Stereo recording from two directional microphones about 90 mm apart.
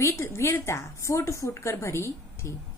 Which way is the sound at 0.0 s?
30° left (ahead or behind).